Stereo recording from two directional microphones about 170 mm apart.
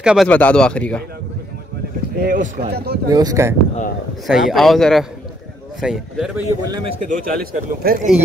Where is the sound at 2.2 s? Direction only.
55° right (ahead or behind).